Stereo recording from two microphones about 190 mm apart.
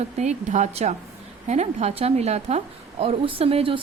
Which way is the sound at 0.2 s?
40° right (ahead or behind).